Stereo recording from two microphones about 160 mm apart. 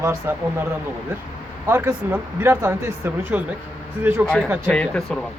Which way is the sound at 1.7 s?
15° right (ahead or behind).